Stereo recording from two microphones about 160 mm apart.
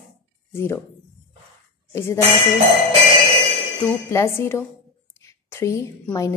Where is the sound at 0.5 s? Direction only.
15° left (ahead or behind).